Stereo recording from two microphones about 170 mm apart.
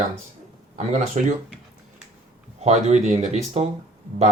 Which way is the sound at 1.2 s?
45° right (ahead or behind).